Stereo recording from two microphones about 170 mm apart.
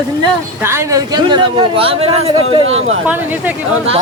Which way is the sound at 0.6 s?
15° right (ahead or behind).